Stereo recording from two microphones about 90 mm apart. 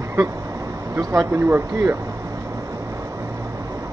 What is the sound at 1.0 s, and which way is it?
Speech, 35° right (ahead or behind).